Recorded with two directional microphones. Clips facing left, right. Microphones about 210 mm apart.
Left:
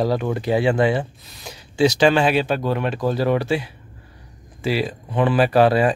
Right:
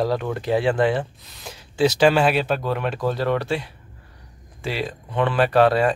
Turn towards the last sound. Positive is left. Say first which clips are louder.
# left 1 dB
turn(degrees=5)  # may be behind; listen again after turning